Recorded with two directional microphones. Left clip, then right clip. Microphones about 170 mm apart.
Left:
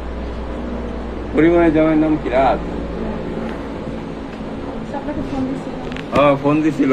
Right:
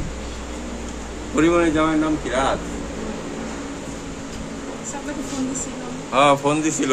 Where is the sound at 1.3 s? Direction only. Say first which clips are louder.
Left 4 dB; 45° right (ahead or behind).